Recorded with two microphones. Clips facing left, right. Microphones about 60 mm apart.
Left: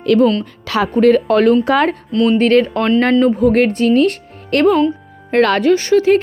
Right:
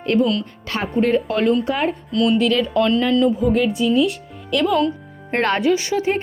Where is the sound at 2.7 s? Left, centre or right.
Left.